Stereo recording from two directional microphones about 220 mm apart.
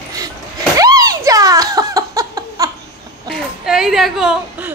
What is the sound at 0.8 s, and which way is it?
Giggle, 15° right (ahead or behind).